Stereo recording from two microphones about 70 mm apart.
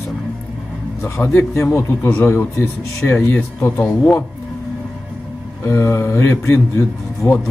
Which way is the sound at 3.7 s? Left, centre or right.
Centre.